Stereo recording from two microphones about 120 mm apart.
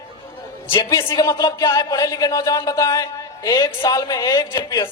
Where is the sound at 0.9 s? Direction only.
25° left (ahead or behind).